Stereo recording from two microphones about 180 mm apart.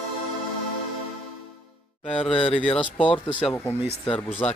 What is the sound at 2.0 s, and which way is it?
Speech, 5° left (ahead or behind).